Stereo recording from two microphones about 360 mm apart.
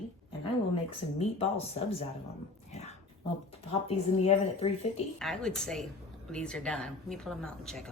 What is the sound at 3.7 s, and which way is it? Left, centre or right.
Speech, centre.